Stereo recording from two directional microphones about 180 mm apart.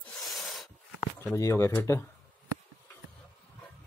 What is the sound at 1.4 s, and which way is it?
Speech, 15° left (ahead or behind).